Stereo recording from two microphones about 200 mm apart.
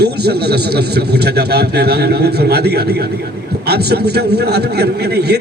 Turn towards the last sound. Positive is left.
turn(degrees=-55)  # may be behind; listen again after turning